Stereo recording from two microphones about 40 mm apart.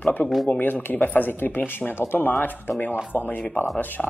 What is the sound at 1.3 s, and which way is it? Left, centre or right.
Speech, left.